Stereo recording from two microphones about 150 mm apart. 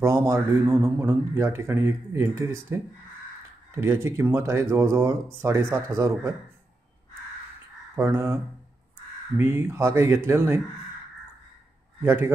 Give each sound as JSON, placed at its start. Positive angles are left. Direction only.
{"t": 0.0, "sound": "speech", "side_deg": -15}
{"t": 7.9, "sound": "speech", "side_deg": -15}
{"t": 9.4, "sound": "speech", "side_deg": -15}
{"t": 12.0, "sound": "a man's voice", "side_deg": -15}